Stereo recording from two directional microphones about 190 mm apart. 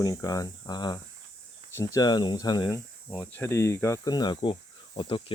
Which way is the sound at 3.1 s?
10° left (ahead or behind).